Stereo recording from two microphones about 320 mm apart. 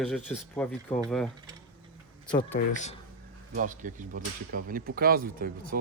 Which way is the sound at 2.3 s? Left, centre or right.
Left.